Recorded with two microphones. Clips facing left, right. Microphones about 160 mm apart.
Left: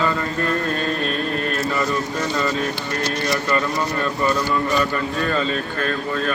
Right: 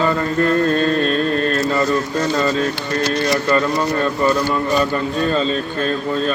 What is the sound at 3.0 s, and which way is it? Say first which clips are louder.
A man's voice: right 5 dB; 35° right (ahead or behind).